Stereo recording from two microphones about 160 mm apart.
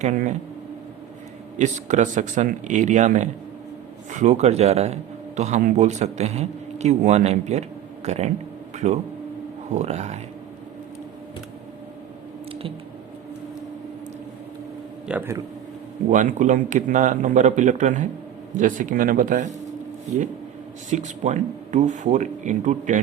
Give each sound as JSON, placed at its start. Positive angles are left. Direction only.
{"t": 0.0, "sound": "speech", "side_deg": -50}
{"t": 1.5, "sound": "speech", "side_deg": -50}
{"t": 15.0, "sound": "speech", "side_deg": -10}
{"t": 16.0, "sound": "speech", "side_deg": -50}
{"t": 20.9, "sound": "speech", "side_deg": -50}